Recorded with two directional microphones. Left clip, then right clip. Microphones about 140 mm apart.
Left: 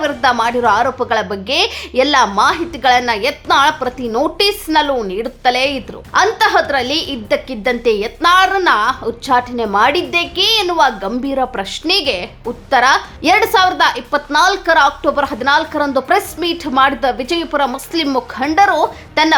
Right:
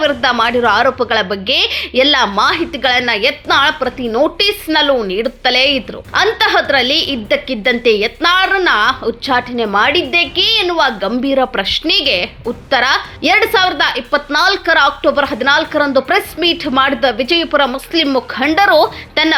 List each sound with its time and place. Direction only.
0.0 s a woman's voice: 15° right (ahead or behind)
4.4 s a woman's voice: 15° right (ahead or behind)
18.4 s speech: 30° right (ahead or behind)